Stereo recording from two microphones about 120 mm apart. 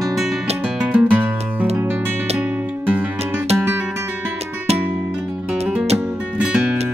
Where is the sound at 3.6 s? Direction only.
15° right (ahead or behind).